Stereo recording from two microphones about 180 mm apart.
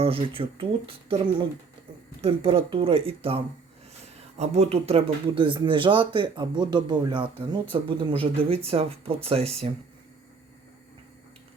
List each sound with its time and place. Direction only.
0.0 s speech: 30° right (ahead or behind)
2.2 s speech: 30° right (ahead or behind)